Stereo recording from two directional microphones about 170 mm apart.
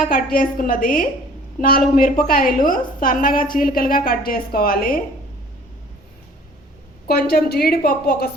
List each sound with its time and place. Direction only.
0.1 s a woman's voice: 55° left (ahead or behind)
7.1 s a woman's voice: 65° left (ahead or behind)